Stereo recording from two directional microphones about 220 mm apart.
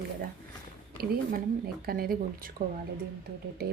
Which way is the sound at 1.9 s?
40° right (ahead or behind).